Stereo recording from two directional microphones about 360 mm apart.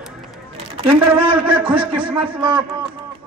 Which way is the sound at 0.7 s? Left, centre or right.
Centre.